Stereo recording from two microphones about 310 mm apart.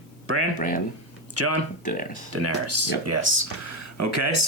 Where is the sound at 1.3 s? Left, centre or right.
Right.